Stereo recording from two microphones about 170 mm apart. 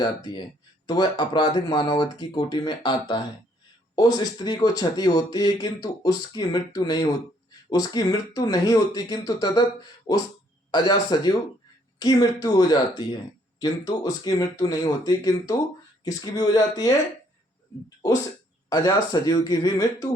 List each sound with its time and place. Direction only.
0.9 s speech: 25° left (ahead or behind)
18.7 s speech: 20° left (ahead or behind)